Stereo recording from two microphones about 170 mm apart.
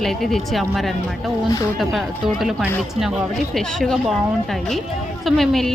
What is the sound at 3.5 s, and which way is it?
Speech, centre (ahead or behind).